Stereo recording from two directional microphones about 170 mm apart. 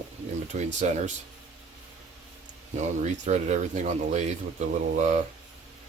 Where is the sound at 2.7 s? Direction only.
45° right (ahead or behind).